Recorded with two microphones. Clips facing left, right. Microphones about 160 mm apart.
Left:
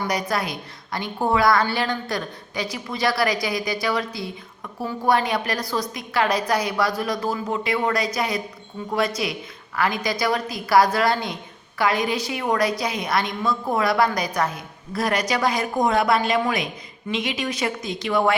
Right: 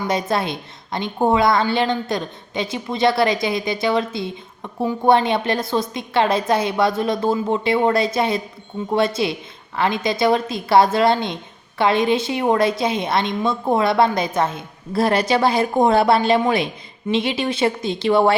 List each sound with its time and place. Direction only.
0.1 s a woman's voice: 25° right (ahead or behind)